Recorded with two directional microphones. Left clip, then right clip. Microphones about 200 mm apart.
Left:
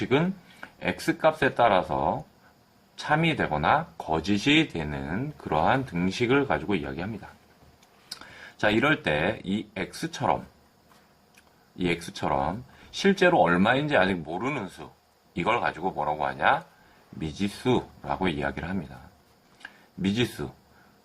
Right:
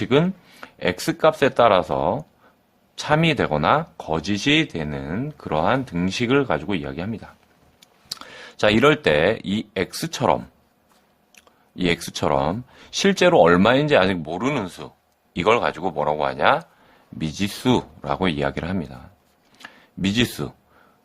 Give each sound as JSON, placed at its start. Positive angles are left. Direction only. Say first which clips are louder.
{"t": 0.0, "sound": "speech", "louder": "right 6 dB", "side_deg": -50}
{"t": 11.8, "sound": "speech", "louder": "right 6 dB", "side_deg": -50}
{"t": 19.5, "sound": "a sound", "louder": "right 4 dB", "side_deg": -50}